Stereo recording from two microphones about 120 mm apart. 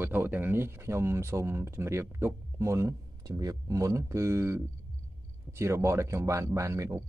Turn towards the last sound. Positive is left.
turn(degrees=-25)  # may be behind; listen again after turning